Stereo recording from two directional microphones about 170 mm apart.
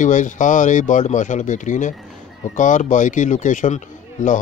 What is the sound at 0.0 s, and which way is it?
Speech, 50° left (ahead or behind).